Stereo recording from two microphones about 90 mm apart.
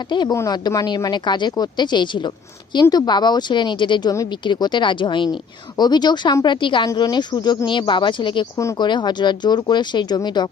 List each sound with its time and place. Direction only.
0.1 s speech: 60° left (ahead or behind)